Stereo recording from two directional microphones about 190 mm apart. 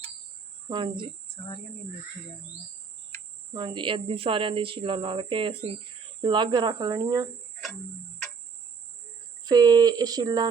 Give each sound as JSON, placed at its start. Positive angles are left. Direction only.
{"t": 0.7, "sound": "speech", "side_deg": -25}
{"t": 3.5, "sound": "speech", "side_deg": -25}
{"t": 9.4, "sound": "speech", "side_deg": -20}